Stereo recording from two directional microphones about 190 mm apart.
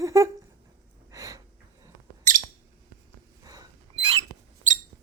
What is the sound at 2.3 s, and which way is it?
Bird, 45° right (ahead or behind).